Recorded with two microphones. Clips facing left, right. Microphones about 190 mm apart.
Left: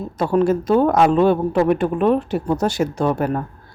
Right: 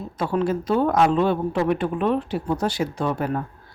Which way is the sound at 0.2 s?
45° left (ahead or behind).